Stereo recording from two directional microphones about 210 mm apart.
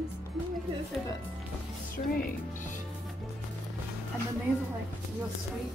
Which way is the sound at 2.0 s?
40° left (ahead or behind).